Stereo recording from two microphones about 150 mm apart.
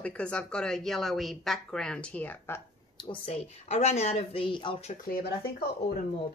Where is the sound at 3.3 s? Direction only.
45° left (ahead or behind).